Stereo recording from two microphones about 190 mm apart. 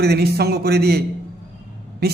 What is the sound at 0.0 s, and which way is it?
A man's voice, 55° right (ahead or behind).